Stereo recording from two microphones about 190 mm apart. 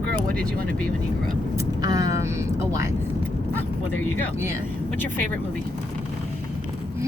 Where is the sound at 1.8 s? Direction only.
20° right (ahead or behind).